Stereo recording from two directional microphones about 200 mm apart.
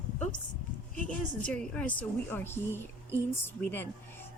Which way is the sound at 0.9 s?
5° left (ahead or behind).